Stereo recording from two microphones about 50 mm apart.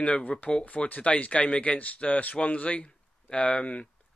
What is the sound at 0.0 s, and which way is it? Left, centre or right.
Speech, left.